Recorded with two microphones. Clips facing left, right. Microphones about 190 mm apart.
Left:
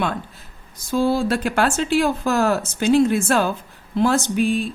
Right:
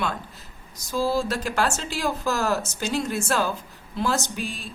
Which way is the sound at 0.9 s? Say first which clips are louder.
Left 5 dB; 55° left (ahead or behind).